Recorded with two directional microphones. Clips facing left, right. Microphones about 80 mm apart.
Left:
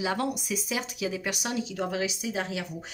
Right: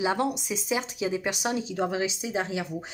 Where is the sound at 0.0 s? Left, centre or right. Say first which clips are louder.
Right 3 dB; right.